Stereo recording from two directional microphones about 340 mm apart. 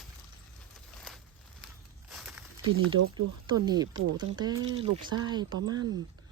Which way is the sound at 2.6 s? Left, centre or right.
Right.